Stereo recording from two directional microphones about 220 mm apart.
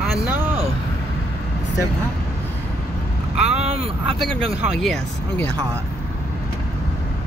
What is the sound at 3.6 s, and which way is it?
Vehicle, 30° right (ahead or behind).